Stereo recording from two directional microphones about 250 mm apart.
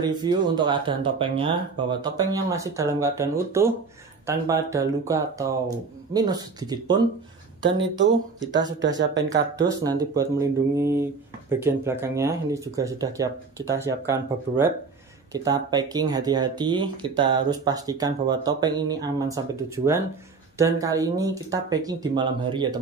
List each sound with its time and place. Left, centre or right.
0.0 s speech: centre
7.6 s speech: right
9.3 s speech: centre